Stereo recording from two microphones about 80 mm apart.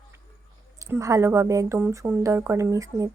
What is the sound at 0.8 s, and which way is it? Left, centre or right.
Speech, right.